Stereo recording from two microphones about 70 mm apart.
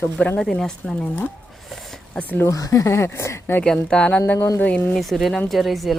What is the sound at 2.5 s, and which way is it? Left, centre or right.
Speech, left.